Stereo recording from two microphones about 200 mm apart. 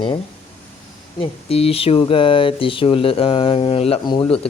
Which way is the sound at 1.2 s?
30° left (ahead or behind).